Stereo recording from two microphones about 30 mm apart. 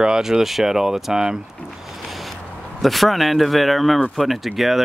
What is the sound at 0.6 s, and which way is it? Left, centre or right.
Speech, centre.